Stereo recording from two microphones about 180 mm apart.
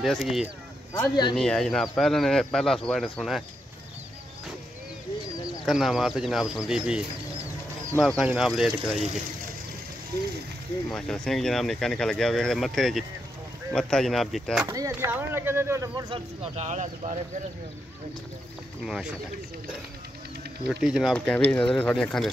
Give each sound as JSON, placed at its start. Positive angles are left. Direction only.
{"t": 0.0, "sound": "speech", "side_deg": 0}
{"t": 5.7, "sound": "speech", "side_deg": 0}
{"t": 8.0, "sound": "speech", "side_deg": 0}
{"t": 10.9, "sound": "speech", "side_deg": 5}
{"t": 14.7, "sound": "speech", "side_deg": -15}
{"t": 16.1, "sound": "speech", "side_deg": -40}
{"t": 18.9, "sound": "speech", "side_deg": 0}
{"t": 20.6, "sound": "speech", "side_deg": -5}